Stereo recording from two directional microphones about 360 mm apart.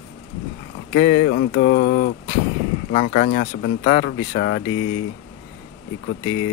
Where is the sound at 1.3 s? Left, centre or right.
Left.